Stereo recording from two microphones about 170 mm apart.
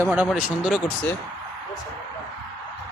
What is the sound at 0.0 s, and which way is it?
Speech, 5° right (ahead or behind).